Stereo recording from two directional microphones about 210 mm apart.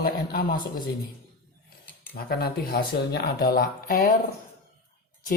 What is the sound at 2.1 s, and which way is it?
Speech, 45° left (ahead or behind).